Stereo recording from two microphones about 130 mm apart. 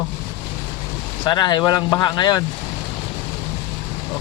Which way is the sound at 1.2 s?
35° left (ahead or behind).